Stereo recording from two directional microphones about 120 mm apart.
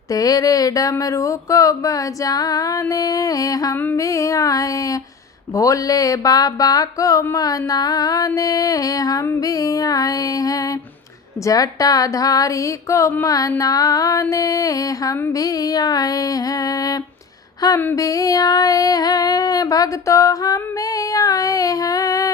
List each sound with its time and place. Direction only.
0.1 s music: 30° left (ahead or behind)